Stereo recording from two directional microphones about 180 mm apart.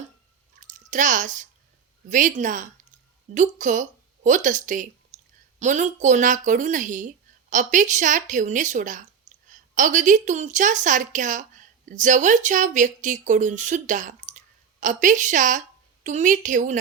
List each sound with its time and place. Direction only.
0.6 s a woman's voice: 45° right (ahead or behind)